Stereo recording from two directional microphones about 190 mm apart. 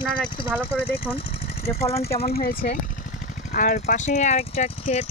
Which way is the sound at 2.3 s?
50° left (ahead or behind).